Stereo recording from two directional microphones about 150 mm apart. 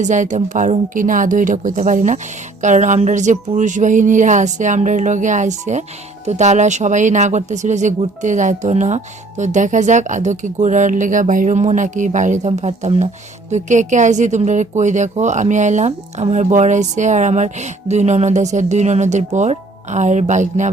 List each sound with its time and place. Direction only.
0.0 s a woman's voice: 55° right (ahead or behind)